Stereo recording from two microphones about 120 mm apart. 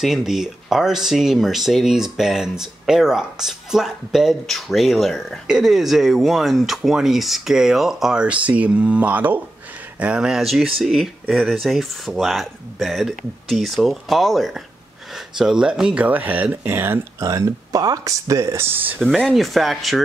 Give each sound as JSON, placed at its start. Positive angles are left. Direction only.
{"t": 0.0, "sound": "speech", "side_deg": -5}
{"t": 18.9, "sound": "speech", "side_deg": 5}